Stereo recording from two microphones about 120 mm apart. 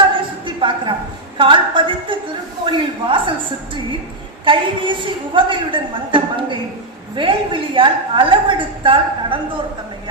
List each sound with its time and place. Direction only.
0.4 s a sound: 45° right (ahead or behind)
1.4 s a woman's voice: 45° right (ahead or behind)
4.4 s a woman's voice: 45° right (ahead or behind)